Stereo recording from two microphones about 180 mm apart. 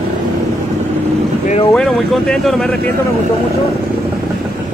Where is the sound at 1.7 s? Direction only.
Centre (ahead or behind).